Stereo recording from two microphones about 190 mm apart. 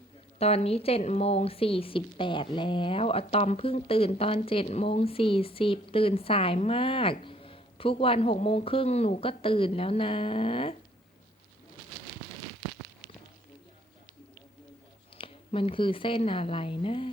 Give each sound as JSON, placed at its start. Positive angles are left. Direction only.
{"t": 0.3, "sound": "a woman's voice", "side_deg": 35}
{"t": 15.2, "sound": "a woman's voice", "side_deg": 30}